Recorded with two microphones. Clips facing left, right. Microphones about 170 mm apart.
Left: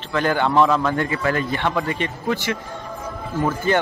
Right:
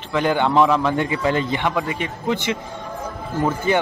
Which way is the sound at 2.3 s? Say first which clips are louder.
Right 2 dB; 20° right (ahead or behind).